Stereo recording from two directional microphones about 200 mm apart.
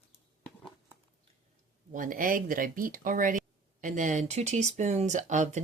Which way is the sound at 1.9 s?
40° right (ahead or behind).